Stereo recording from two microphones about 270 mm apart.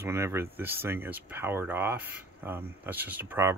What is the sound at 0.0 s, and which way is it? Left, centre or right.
Speech, centre.